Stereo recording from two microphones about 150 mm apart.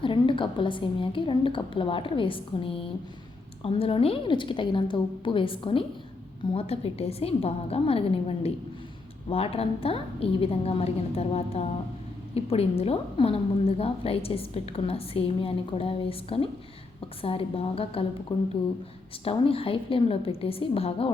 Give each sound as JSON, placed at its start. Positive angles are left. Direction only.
{"t": 0.0, "sound": "a woman's voice", "side_deg": 35}